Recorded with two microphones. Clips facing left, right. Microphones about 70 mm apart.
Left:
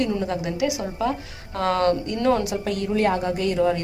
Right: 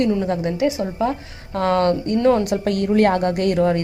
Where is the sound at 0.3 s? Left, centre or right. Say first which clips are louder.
Right 4 dB; right.